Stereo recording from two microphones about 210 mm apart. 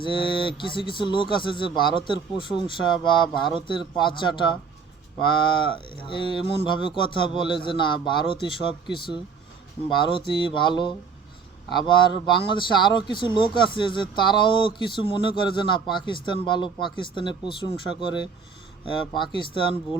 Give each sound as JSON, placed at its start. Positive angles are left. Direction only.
{"t": 0.0, "sound": "speech", "side_deg": 25}
{"t": 5.6, "sound": "speech", "side_deg": 25}
{"t": 10.0, "sound": "speech", "side_deg": 25}